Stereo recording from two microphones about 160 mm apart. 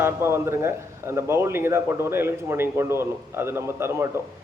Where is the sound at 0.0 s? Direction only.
15° right (ahead or behind).